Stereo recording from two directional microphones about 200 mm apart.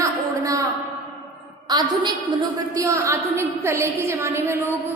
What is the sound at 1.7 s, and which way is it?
A woman's voice, 20° right (ahead or behind).